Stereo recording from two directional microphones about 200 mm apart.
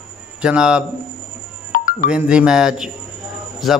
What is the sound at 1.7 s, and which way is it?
Music, 40° left (ahead or behind).